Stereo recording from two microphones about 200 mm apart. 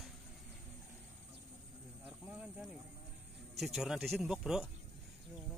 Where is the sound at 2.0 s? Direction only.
5° right (ahead or behind).